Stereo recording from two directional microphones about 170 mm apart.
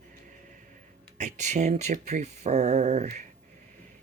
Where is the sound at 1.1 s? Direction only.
45° right (ahead or behind).